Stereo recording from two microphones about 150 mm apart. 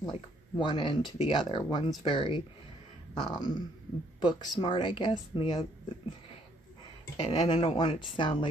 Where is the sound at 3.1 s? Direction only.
30° left (ahead or behind).